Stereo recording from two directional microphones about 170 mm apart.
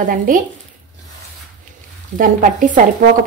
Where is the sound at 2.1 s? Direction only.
55° right (ahead or behind).